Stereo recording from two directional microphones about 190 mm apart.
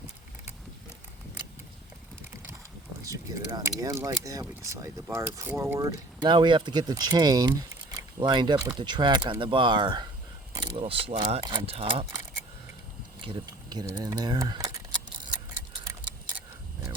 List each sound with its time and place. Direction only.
3.0 s speech: 20° right (ahead or behind)
13.2 s speech: 25° right (ahead or behind)